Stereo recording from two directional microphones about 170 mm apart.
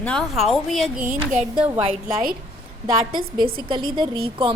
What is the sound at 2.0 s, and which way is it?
Speech, 55° right (ahead or behind).